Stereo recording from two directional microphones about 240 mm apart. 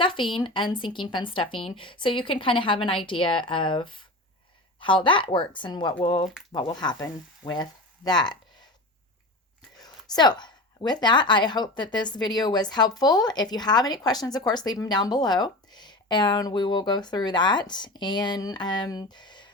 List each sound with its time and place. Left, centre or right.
0.0 s a woman's voice: left
9.7 s speech: centre